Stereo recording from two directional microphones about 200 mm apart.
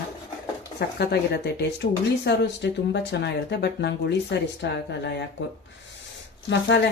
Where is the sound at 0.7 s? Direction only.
55° left (ahead or behind).